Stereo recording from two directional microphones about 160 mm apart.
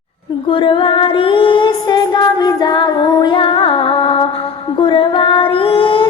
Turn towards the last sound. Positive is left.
turn(degrees=35)  # may be behind; listen again after turning